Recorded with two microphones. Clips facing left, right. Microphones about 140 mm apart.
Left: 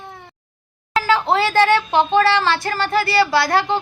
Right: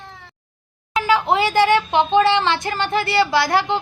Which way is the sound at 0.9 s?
15° right (ahead or behind).